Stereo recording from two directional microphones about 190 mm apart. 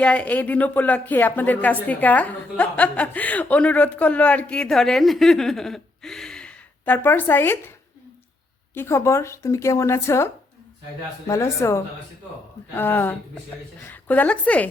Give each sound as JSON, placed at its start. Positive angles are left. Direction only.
{"t": 0.0, "sound": "speech", "side_deg": 5}
{"t": 8.7, "sound": "speech", "side_deg": 15}